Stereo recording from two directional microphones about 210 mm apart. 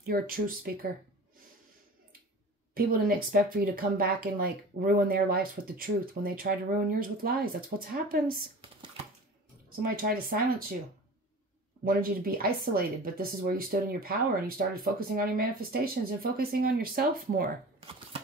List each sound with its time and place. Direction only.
0.0 s speech: 45° right (ahead or behind)
2.7 s speech: 45° right (ahead or behind)
8.5 s a sound: 25° right (ahead or behind)
9.7 s speech: 45° right (ahead or behind)
11.8 s speech: 40° right (ahead or behind)